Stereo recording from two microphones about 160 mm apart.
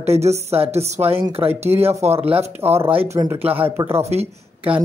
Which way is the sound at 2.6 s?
15° right (ahead or behind).